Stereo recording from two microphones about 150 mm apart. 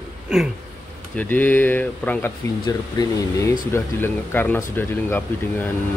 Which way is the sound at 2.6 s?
25° left (ahead or behind).